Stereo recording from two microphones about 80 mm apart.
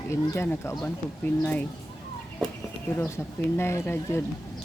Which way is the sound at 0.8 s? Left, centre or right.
Centre.